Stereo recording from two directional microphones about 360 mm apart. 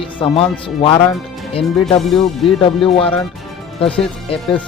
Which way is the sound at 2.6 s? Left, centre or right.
Centre.